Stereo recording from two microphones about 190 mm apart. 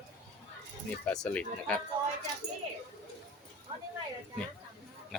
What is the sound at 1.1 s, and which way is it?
Speech, 5° left (ahead or behind).